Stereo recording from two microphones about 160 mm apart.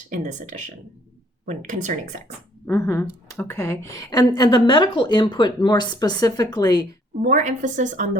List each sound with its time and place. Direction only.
0.1 s a woman's voice: 50° right (ahead or behind)
2.6 s a woman's voice: 15° left (ahead or behind)
7.2 s a woman's voice: 50° right (ahead or behind)